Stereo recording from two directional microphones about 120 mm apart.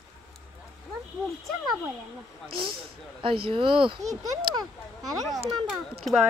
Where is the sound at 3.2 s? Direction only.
45° right (ahead or behind).